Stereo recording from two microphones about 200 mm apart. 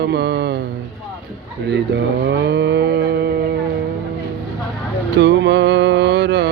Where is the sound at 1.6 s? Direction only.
60° right (ahead or behind).